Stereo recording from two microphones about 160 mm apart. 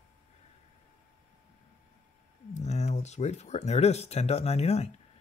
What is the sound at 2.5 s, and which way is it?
Speech, 45° left (ahead or behind).